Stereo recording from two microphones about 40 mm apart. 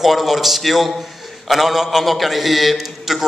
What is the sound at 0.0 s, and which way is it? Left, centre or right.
A man's voice, centre.